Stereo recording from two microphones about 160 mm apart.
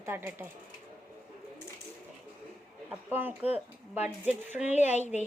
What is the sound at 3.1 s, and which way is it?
A woman's voice, 10° right (ahead or behind).